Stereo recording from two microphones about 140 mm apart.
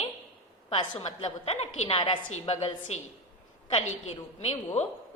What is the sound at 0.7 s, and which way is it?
A woman's voice, 45° left (ahead or behind).